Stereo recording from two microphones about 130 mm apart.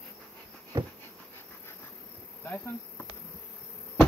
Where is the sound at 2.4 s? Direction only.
15° left (ahead or behind).